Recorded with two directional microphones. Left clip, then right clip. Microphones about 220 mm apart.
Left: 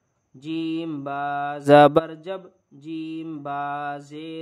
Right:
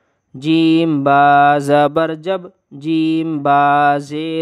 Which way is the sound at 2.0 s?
50° right (ahead or behind).